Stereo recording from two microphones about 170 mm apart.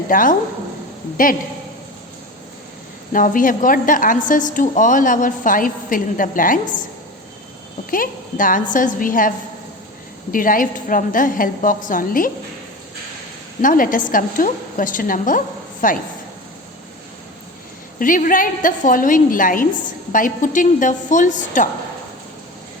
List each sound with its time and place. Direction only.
0.1 s a woman's voice: 55° left (ahead or behind)
3.1 s a woman's voice: 50° left (ahead or behind)
7.9 s a woman's voice: 55° left (ahead or behind)
10.3 s a woman's voice: 55° left (ahead or behind)
13.6 s a woman's voice: 55° left (ahead or behind)
18.0 s a woman's voice: 50° left (ahead or behind)